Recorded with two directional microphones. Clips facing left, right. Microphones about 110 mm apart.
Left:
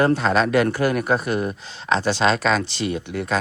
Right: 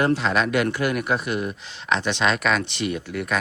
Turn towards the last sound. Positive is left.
turn(degrees=30)  # may be behind; listen again after turning